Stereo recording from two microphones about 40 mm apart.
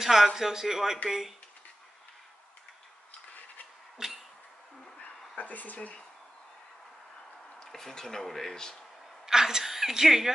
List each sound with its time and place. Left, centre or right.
0.0 s a man's voice: centre
4.0 s cough: centre
5.4 s speech: left
7.6 s speech: centre
9.2 s a woman's voice: centre